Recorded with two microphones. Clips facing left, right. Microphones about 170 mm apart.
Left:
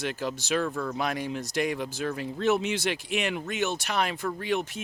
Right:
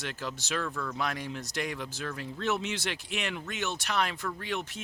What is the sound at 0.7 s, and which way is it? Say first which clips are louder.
Speech: left 5 dB; 30° left (ahead or behind).